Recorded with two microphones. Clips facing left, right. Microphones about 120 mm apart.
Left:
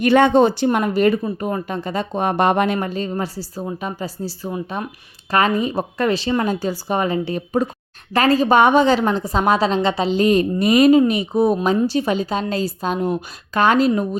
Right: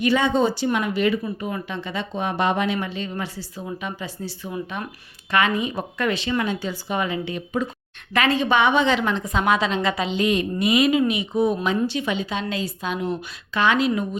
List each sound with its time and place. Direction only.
0.0 s speech: 60° left (ahead or behind); by 14.2 s 40° left (ahead or behind)